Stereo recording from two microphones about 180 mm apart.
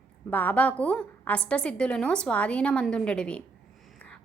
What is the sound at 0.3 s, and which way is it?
A woman's voice, 10° left (ahead or behind).